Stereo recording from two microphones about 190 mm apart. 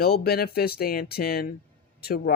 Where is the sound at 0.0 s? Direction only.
55° left (ahead or behind).